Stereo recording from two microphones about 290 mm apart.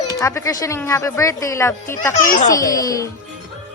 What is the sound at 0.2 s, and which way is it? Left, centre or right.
Speech, centre.